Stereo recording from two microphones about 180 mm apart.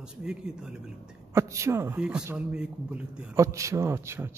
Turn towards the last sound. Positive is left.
turn(degrees=-15)  # may be behind; listen again after turning